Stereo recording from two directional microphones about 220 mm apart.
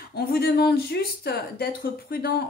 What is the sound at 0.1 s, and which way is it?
Speech, 45° left (ahead or behind).